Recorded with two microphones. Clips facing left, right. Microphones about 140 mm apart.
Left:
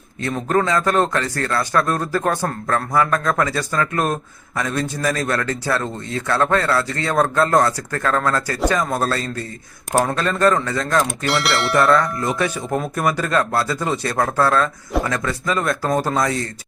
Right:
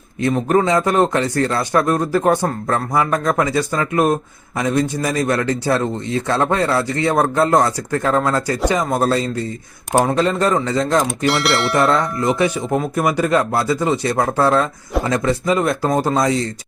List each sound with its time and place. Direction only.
0.2 s a man's voice: 15° right (ahead or behind)
11.3 s speech: centre (ahead or behind)
11.8 s a man's voice: 25° right (ahead or behind)
12.8 s speech: 5° right (ahead or behind)
13.1 s a man's voice: 15° right (ahead or behind)